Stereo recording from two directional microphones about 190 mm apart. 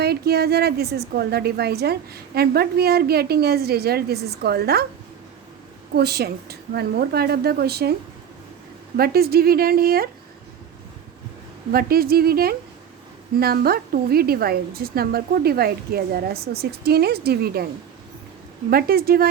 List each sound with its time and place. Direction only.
0.0 s a woman's voice: 55° right (ahead or behind)
5.9 s a woman's voice: 60° right (ahead or behind)
9.0 s a woman's voice: 55° right (ahead or behind)
11.7 s a woman's voice: 55° right (ahead or behind)
18.7 s a woman's voice: 55° right (ahead or behind)